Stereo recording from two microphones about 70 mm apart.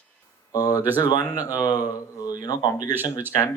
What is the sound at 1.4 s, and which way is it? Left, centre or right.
Speech, left.